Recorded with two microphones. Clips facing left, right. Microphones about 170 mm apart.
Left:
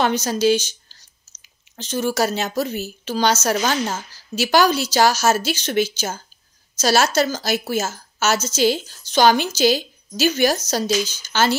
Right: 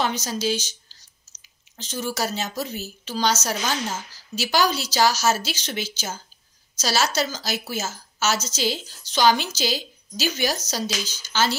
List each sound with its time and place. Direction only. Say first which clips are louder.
0.0 s a woman's voice: left 7 dB; 60° left (ahead or behind)
1.8 s a woman's voice: left 7 dB; 60° left (ahead or behind)